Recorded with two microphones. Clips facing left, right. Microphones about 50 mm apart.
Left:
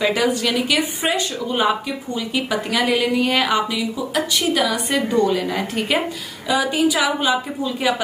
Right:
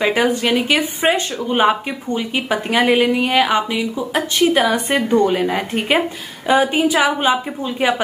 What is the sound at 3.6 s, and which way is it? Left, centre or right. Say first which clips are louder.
Speech: right 2 dB; right.